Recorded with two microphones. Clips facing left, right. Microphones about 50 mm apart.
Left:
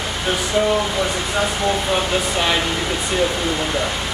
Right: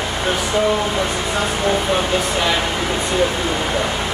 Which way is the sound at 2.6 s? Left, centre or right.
Centre.